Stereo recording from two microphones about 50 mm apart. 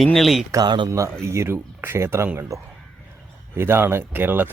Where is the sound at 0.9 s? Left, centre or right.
Right.